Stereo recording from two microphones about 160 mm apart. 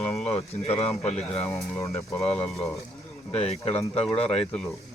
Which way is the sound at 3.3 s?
40° left (ahead or behind).